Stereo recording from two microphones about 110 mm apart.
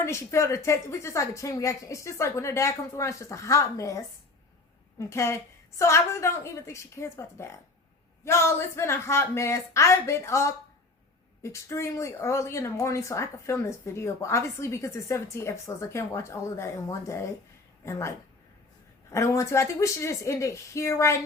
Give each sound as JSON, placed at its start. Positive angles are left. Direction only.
{"t": 0.0, "sound": "speech", "side_deg": 25}
{"t": 19.1, "sound": "speech", "side_deg": 30}